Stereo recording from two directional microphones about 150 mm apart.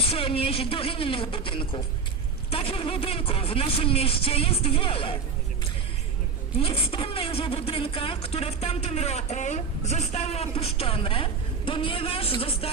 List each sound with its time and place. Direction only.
0.0 s speech: 40° left (ahead or behind)
6.6 s speech: 40° left (ahead or behind)